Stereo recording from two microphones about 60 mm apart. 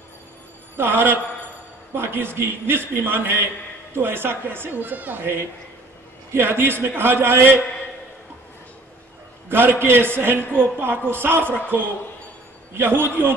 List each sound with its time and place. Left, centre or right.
0.7 s speech: right
9.5 s speech: right